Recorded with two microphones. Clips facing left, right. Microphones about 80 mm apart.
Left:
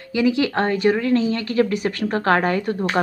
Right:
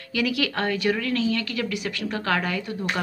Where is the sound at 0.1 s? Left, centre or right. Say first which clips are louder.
Left 6 dB; left.